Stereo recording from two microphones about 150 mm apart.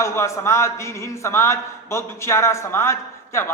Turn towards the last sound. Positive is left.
turn(degrees=20)  # may be behind; listen again after turning